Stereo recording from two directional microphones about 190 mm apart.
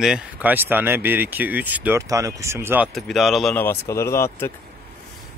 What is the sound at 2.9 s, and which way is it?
Speech, centre (ahead or behind).